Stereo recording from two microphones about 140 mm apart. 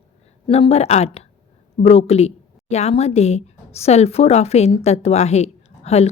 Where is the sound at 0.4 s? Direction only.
40° left (ahead or behind).